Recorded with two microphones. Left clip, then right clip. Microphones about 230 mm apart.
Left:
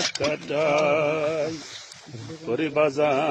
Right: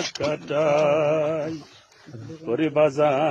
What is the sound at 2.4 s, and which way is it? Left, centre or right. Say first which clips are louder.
Speech: right 2 dB; right.